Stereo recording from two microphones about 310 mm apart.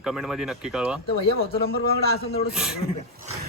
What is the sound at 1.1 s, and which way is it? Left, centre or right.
Speech, centre.